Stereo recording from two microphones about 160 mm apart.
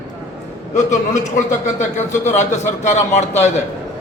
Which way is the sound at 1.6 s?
50° left (ahead or behind).